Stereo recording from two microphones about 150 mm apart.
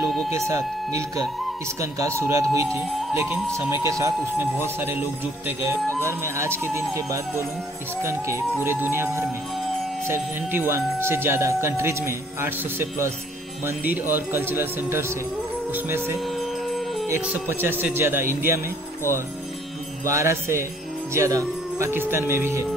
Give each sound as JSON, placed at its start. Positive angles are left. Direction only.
{"t": 0.5, "sound": "speech", "side_deg": -20}
{"t": 3.8, "sound": "speech", "side_deg": -20}
{"t": 16.3, "sound": "music", "side_deg": 0}
{"t": 17.1, "sound": "speech", "side_deg": -15}
{"t": 20.1, "sound": "speech", "side_deg": -20}